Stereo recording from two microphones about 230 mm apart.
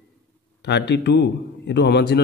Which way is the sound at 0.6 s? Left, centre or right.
Left.